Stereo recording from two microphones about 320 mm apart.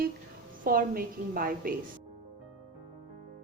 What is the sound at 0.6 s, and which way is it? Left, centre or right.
A woman's voice, right.